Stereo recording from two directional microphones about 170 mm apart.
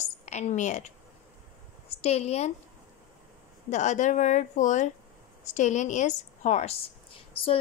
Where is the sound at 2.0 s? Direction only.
40° left (ahead or behind).